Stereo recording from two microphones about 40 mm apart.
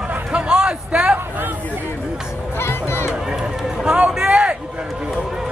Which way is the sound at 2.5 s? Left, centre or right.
Left.